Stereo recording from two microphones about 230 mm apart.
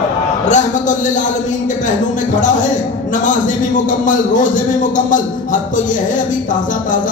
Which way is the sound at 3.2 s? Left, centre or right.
Left.